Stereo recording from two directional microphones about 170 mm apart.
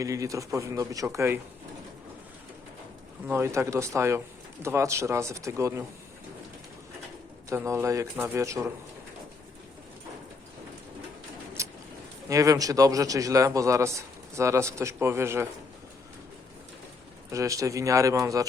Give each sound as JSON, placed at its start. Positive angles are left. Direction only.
{"t": 0.0, "sound": "a man's voice", "side_deg": -20}
{"t": 3.2, "sound": "speech", "side_deg": -15}
{"t": 7.5, "sound": "speech", "side_deg": -15}
{"t": 11.6, "sound": "vehicle", "side_deg": -15}
{"t": 12.3, "sound": "a man's voice", "side_deg": -20}
{"t": 17.3, "sound": "a man's voice", "side_deg": -20}